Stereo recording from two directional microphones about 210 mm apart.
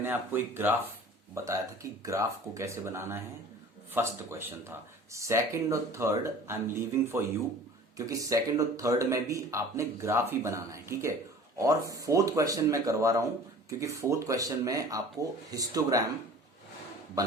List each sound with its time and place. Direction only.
0.0 s speech: 10° right (ahead or behind)